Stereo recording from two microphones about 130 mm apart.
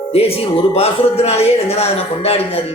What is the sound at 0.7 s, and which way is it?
Speech, 50° left (ahead or behind).